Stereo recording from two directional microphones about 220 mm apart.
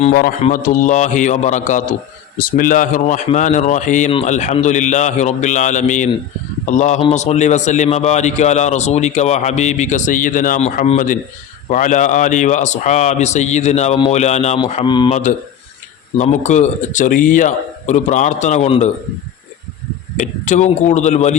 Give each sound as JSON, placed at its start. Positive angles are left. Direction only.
{"t": 0.0, "sound": "a man's voice", "side_deg": 35}
{"t": 16.1, "sound": "a man's voice", "side_deg": 35}
{"t": 20.1, "sound": "a man's voice", "side_deg": 35}